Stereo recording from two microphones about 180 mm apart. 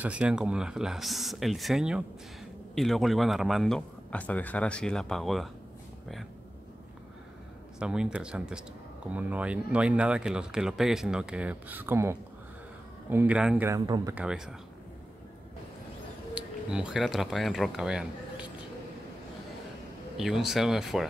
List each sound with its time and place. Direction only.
0.0 s a man's voice: 5° right (ahead or behind)
7.8 s a man's voice: 5° right (ahead or behind)
13.7 s speech: 20° right (ahead or behind)
14.1 s a man's voice: 5° right (ahead or behind)
16.3 s speech: 5° right (ahead or behind)
20.2 s a man's voice: centre (ahead or behind)